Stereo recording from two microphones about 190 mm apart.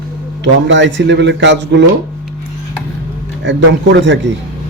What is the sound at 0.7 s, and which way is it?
A man's voice, 70° right (ahead or behind).